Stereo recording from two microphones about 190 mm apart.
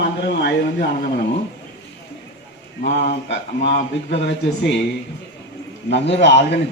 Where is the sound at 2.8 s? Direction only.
35° left (ahead or behind).